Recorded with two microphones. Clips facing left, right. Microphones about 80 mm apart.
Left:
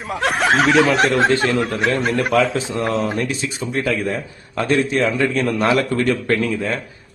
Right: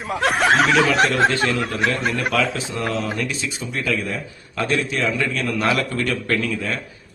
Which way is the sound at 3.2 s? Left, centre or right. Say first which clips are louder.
Left 3 dB; left.